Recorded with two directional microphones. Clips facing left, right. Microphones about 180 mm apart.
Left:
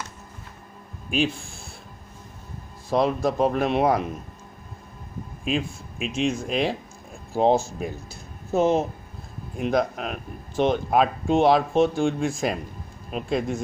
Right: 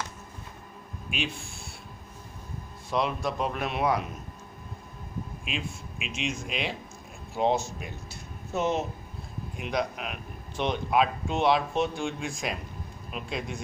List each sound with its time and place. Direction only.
2.9 s speech: 35° left (ahead or behind)
5.4 s speech: 40° left (ahead or behind)